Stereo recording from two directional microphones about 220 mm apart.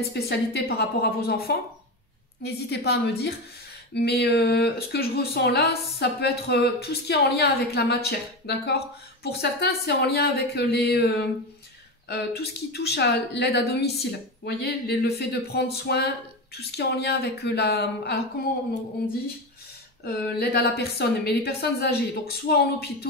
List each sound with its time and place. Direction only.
0.1 s speech: 50° left (ahead or behind)
20.1 s speech: 45° left (ahead or behind)